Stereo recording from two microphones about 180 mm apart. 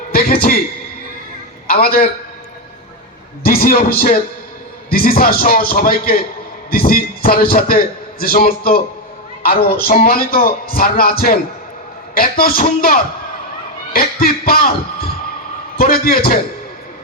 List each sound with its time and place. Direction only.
0.1 s a sound: 55° left (ahead or behind)
1.6 s a man's voice: 55° left (ahead or behind)
3.4 s a man's voice: 55° left (ahead or behind)
15.8 s a man's voice: 55° left (ahead or behind)